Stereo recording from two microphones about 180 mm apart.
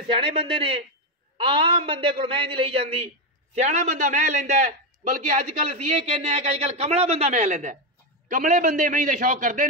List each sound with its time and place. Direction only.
0.1 s a man's voice: 30° right (ahead or behind); by 9.7 s 50° right (ahead or behind)